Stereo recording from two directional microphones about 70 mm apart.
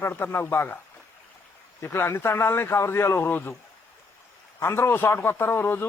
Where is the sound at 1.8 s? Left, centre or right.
Left.